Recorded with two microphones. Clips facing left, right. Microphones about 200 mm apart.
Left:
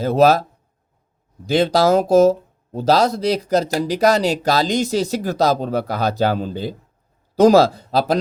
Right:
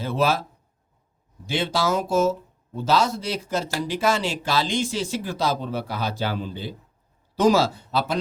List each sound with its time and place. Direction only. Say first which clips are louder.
0.0 s speech: left 9 dB; 40° left (ahead or behind)
1.5 s speech: left 9 dB; 40° left (ahead or behind)